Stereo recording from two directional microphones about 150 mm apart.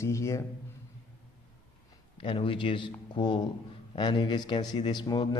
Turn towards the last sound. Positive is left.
turn(degrees=30)  # may be behind; listen again after turning